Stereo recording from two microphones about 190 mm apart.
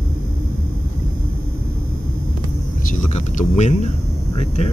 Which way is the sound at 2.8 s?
40° left (ahead or behind).